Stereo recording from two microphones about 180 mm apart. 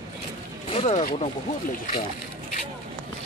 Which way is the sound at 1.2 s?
45° left (ahead or behind).